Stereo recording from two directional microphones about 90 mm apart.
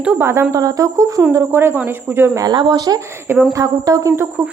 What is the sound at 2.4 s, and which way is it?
A woman's voice, 55° right (ahead or behind).